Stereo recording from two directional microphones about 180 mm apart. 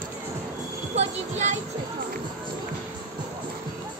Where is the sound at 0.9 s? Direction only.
40° right (ahead or behind).